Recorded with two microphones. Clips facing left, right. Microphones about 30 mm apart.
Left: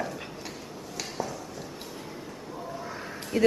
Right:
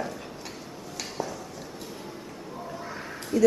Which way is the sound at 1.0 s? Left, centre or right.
Centre.